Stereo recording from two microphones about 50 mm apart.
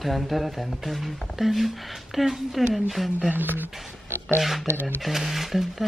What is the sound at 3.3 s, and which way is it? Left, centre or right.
Speech, right.